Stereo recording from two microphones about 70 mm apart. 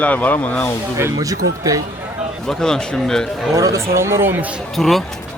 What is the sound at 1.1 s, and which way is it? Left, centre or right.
Speech, right.